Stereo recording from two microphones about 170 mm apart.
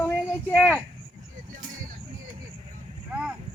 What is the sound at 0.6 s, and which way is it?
Speech, 5° left (ahead or behind).